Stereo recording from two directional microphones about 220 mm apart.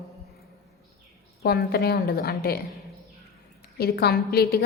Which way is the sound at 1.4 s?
45° left (ahead or behind).